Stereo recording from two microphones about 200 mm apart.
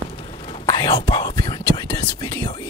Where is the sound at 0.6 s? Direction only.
20° left (ahead or behind).